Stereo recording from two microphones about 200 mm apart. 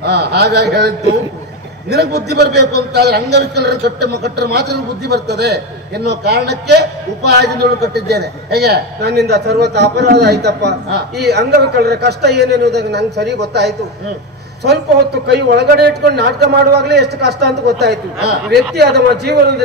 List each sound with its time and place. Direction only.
0.0 s a man's voice: 55° right (ahead or behind)
15.2 s a man's voice: 55° right (ahead or behind)